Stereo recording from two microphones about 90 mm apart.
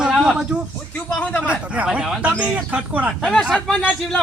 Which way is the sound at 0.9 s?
15° left (ahead or behind).